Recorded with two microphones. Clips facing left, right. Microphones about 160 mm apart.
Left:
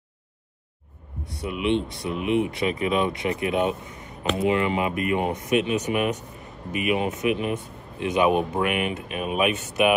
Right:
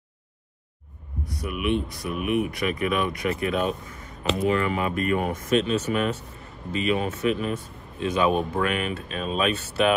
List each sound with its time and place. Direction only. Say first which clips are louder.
1.2 s speech: left 2 dB; 25° left (ahead or behind)